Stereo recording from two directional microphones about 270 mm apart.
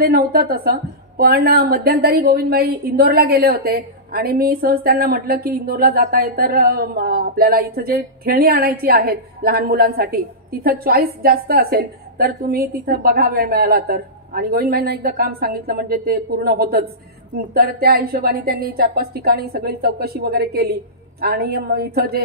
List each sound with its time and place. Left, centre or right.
0.0 s a woman's voice: right